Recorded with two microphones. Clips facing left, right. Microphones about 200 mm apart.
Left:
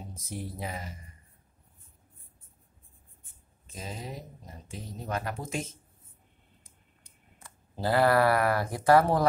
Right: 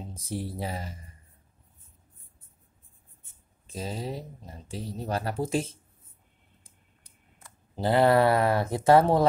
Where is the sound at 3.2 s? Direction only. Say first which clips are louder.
Even; 30° right (ahead or behind).